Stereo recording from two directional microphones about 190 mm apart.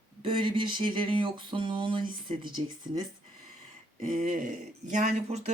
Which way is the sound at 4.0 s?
45° right (ahead or behind).